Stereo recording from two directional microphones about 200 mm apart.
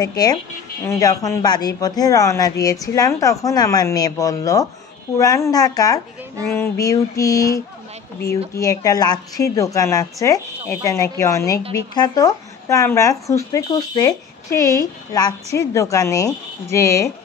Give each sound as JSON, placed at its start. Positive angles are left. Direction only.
{"t": 0.0, "sound": "speech", "side_deg": 20}